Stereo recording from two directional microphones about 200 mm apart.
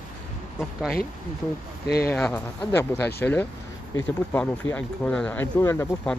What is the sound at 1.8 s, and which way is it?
Speech, 50° left (ahead or behind).